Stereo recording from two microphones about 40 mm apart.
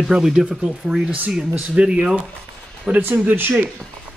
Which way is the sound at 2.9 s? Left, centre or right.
Right.